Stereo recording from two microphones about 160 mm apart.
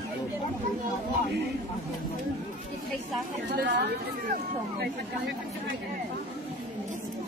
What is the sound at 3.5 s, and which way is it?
Speech, 75° right (ahead or behind).